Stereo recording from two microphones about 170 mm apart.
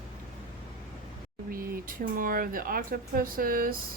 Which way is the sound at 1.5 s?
55° right (ahead or behind).